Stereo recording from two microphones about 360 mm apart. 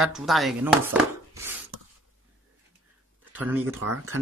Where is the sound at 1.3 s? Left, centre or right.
Centre.